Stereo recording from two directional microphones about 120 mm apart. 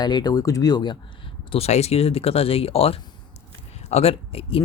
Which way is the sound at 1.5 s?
60° left (ahead or behind).